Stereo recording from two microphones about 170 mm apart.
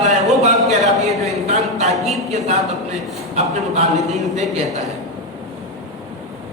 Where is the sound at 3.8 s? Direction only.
Centre (ahead or behind).